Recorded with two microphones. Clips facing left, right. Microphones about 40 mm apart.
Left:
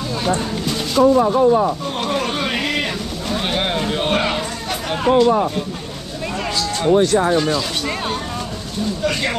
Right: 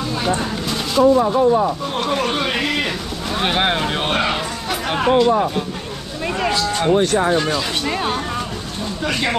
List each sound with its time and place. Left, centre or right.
0.4 s a sound: centre
2.0 s speech: centre
3.3 s speech: centre
4.1 s speech: centre